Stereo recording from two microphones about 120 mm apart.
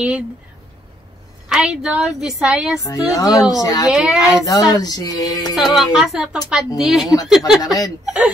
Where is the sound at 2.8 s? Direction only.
30° left (ahead or behind).